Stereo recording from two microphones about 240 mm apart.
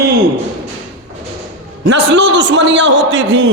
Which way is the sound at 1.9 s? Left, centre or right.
Right.